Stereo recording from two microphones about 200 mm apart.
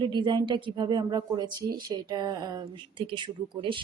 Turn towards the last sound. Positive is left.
turn(degrees=-25)  # may be behind; listen again after turning